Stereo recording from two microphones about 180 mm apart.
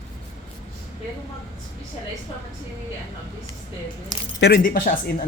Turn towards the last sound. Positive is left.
turn(degrees=50)  # may be behind; listen again after turning